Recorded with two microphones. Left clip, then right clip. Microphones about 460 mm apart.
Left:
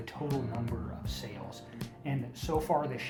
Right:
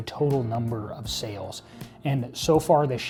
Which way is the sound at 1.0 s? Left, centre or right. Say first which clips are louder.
Right 10 dB; right.